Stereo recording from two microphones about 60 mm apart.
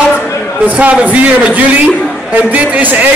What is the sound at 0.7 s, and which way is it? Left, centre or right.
A man's voice, right.